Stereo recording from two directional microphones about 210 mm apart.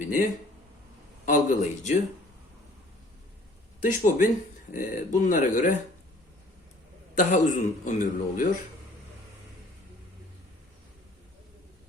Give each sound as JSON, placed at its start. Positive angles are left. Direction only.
{"t": 0.0, "sound": "a man's voice", "side_deg": 40}
{"t": 3.8, "sound": "a man's voice", "side_deg": 40}
{"t": 7.2, "sound": "a man's voice", "side_deg": 35}